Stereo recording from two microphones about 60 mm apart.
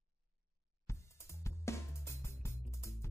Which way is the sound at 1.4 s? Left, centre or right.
Left.